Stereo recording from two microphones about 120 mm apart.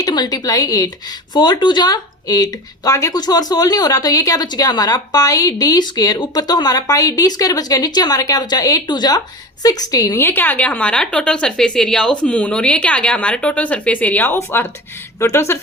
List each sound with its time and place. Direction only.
0.0 s speech: 35° left (ahead or behind)